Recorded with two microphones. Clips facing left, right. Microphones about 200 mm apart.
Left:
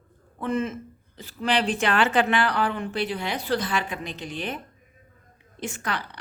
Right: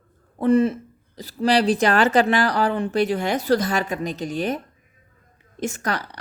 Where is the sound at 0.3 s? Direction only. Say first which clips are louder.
Right 9 dB; 35° right (ahead or behind).